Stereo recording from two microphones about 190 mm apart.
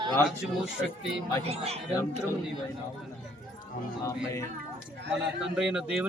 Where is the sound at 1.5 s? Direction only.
30° right (ahead or behind).